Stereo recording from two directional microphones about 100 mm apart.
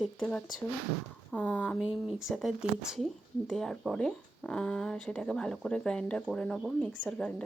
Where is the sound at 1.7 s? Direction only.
5° right (ahead or behind).